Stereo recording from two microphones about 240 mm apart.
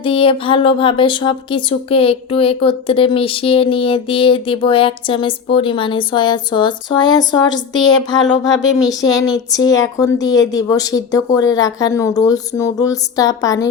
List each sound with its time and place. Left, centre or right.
0.0 s speech: left